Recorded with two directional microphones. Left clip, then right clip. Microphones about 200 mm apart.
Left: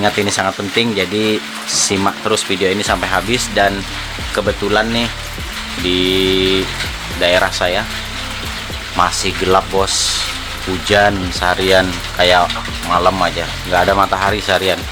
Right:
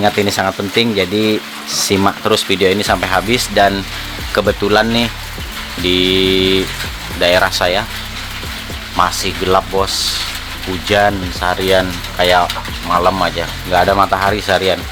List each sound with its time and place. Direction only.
0.0 s speech: 15° right (ahead or behind)
4.4 s a sound: 20° right (ahead or behind)
9.0 s speech: 5° right (ahead or behind)